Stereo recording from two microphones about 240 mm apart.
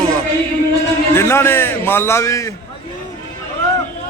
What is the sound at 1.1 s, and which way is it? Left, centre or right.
A man's voice, centre.